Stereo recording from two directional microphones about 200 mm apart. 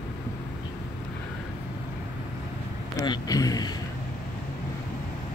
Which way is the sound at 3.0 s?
20° left (ahead or behind).